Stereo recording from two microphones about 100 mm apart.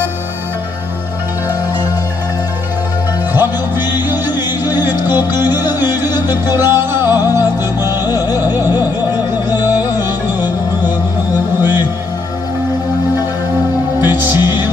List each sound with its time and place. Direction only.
3.3 s music: 20° right (ahead or behind)
4.8 s music: 20° right (ahead or behind)
8.0 s music: 40° left (ahead or behind)
9.3 s music: 20° right (ahead or behind)
14.0 s music: 20° right (ahead or behind)